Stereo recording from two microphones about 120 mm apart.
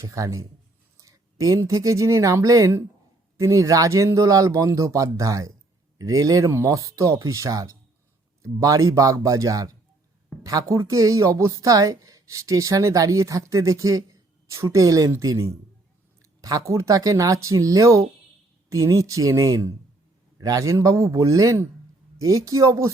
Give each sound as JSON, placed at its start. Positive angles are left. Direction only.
{"t": 0.0, "sound": "a woman's voice", "side_deg": -25}